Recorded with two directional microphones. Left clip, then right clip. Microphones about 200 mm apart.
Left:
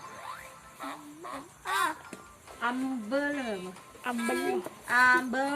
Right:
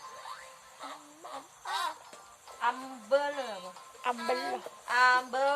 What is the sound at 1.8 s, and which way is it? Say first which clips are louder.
Babbling: left 5 dB; 40° left (ahead or behind).